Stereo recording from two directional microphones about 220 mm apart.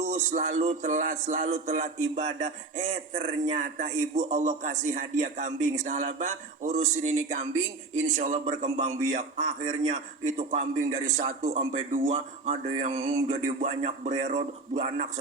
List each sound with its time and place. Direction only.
0.0 s a man's voice: 35° right (ahead or behind)
7.9 s a man's voice: 30° right (ahead or behind)